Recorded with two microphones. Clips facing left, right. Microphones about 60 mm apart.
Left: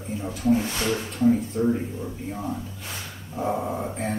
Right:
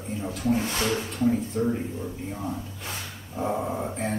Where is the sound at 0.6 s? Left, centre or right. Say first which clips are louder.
Left 1 dB; right.